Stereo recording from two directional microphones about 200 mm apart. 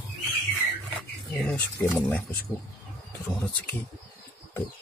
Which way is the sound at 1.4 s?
Centre (ahead or behind).